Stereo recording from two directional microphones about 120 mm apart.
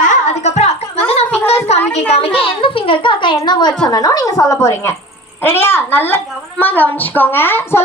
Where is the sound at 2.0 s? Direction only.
55° left (ahead or behind).